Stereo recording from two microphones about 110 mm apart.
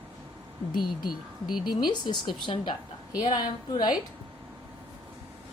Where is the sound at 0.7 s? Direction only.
45° left (ahead or behind).